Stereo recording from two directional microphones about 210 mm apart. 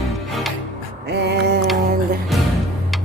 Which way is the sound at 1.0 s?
50° right (ahead or behind).